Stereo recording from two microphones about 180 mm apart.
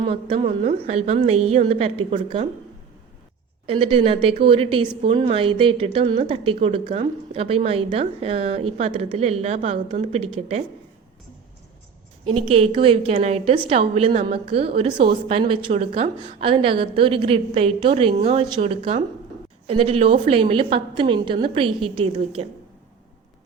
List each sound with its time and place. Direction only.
0.0 s a woman's voice: 30° right (ahead or behind)
3.7 s a woman's voice: 30° right (ahead or behind)
12.3 s a woman's voice: 30° right (ahead or behind)